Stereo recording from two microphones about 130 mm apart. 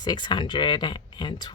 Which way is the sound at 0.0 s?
35° left (ahead or behind).